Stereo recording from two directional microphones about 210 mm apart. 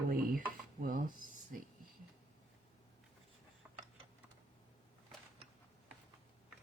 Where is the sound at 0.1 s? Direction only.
45° right (ahead or behind).